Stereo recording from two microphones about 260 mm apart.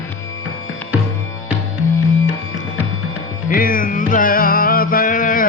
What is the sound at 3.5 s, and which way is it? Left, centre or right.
Music, left.